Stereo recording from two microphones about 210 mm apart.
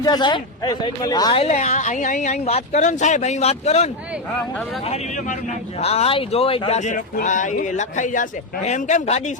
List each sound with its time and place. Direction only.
0.0 s speech: 20° left (ahead or behind)